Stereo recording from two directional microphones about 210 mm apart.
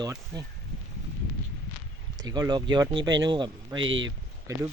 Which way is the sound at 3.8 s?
65° right (ahead or behind).